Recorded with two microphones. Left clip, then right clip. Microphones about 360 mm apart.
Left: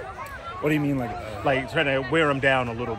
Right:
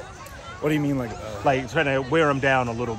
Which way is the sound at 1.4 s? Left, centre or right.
Right.